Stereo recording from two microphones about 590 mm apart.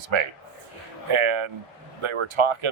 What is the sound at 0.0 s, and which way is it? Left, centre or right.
Speech, right.